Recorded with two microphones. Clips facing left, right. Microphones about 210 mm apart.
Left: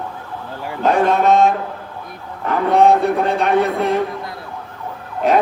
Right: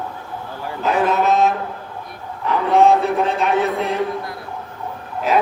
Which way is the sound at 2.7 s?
Centre (ahead or behind).